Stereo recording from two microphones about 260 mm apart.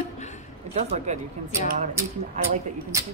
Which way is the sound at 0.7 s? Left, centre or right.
Right.